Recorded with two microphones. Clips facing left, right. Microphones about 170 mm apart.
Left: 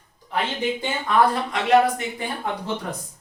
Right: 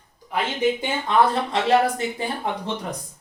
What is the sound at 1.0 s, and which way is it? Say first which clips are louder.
Speech: even; 30° right (ahead or behind).